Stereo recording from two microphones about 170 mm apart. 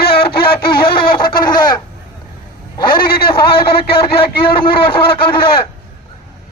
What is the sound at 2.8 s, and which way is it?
Chicken, 60° left (ahead or behind).